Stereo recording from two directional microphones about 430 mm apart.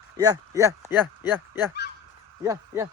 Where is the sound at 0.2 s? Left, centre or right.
Centre.